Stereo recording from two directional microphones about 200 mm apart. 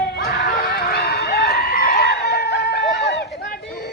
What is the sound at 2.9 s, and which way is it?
Run, 60° left (ahead or behind).